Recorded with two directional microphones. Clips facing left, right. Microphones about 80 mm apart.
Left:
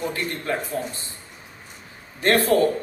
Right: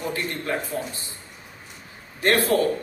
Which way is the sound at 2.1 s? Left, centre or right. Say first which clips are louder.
Left 2 dB; left.